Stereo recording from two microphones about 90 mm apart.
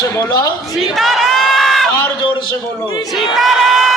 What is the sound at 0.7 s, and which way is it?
Crowd, centre (ahead or behind).